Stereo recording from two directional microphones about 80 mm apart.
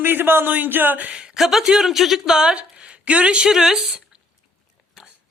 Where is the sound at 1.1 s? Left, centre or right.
Centre.